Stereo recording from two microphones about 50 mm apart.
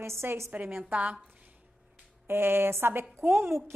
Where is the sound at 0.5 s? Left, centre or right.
Right.